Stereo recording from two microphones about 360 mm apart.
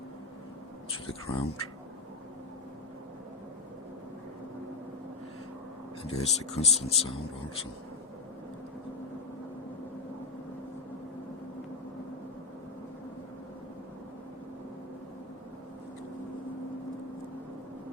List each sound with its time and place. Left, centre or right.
0.9 s speech: centre
6.0 s speech: centre